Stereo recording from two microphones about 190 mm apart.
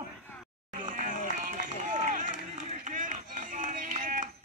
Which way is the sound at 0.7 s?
45° right (ahead or behind).